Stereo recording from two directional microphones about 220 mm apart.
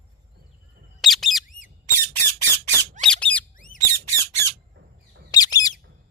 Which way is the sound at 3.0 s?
5° left (ahead or behind).